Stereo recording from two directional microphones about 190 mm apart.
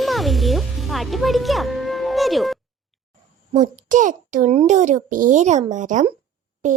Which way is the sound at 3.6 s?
40° right (ahead or behind).